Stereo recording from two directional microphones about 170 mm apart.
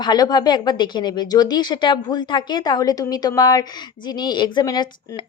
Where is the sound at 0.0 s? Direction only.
25° left (ahead or behind).